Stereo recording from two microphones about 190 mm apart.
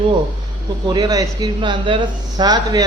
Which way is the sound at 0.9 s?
20° right (ahead or behind).